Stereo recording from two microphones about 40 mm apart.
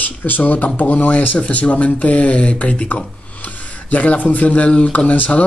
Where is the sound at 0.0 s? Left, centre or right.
Left.